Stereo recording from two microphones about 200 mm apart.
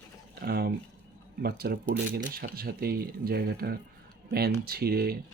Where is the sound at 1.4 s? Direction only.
50° right (ahead or behind).